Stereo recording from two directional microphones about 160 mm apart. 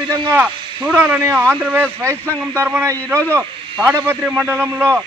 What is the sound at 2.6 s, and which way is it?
Speech, 10° right (ahead or behind).